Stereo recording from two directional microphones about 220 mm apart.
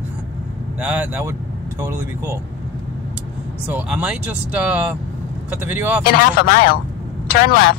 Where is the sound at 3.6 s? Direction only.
5° right (ahead or behind).